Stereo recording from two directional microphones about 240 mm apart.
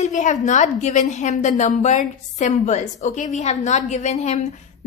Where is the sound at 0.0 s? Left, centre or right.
Left.